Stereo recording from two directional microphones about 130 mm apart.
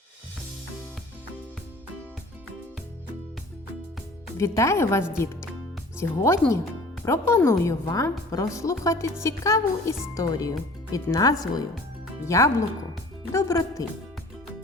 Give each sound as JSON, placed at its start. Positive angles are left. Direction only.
{"t": 4.4, "sound": "a woman's voice", "side_deg": 20}